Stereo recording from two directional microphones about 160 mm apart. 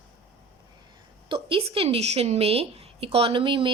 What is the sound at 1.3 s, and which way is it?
A woman's voice, 35° right (ahead or behind).